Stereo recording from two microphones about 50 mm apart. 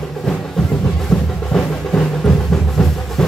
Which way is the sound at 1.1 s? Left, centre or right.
Centre.